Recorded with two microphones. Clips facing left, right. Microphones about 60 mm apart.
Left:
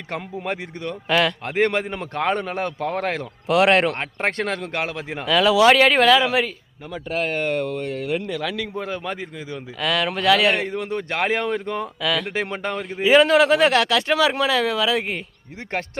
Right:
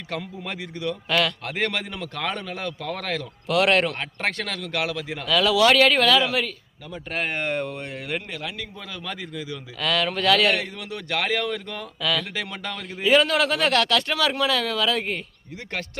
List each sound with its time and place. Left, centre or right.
0.1 s a man's voice: left
1.0 s a man's voice: centre; by 3.2 s left
3.4 s speech: left
3.9 s a man's voice: left
5.2 s speech: left
8.9 s a man's voice: left
9.8 s speech: centre
10.5 s a man's voice: left; by 15.2 s centre